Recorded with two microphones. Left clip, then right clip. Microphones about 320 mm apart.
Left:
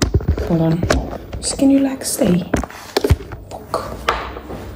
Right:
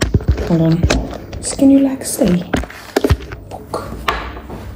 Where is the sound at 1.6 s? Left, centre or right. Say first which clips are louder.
Right 3 dB; right.